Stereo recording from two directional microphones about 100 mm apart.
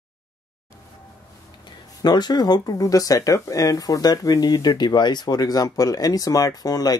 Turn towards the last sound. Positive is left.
turn(degrees=40)  # may be behind; listen again after turning